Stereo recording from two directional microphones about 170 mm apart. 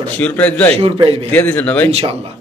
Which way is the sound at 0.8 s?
30° right (ahead or behind).